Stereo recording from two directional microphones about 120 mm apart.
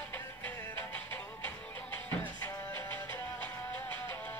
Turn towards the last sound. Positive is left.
turn(degrees=15)  # may be behind; listen again after turning